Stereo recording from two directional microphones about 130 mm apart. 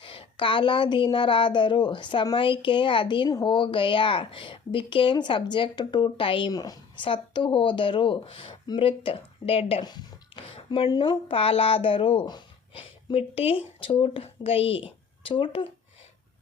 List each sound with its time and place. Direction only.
0.0 s a woman's voice: 40° left (ahead or behind)
9.8 s a sound: 35° left (ahead or behind)
10.9 s a woman's voice: 35° left (ahead or behind)